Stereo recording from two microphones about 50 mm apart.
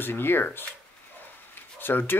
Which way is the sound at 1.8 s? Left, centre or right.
Left.